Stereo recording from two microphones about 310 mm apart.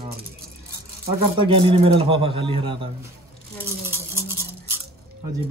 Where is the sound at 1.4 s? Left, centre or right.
Centre.